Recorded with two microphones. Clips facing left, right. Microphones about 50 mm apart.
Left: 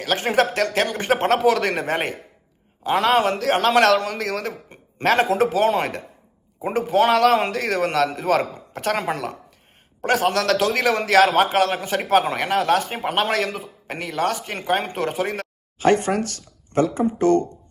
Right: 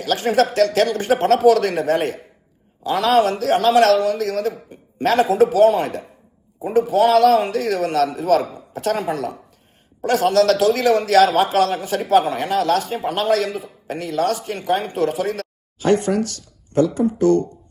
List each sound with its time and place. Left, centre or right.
0.0 s a man's voice: left
10.0 s a man's voice: left